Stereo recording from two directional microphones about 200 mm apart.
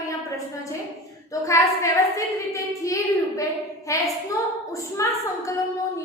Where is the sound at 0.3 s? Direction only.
15° left (ahead or behind).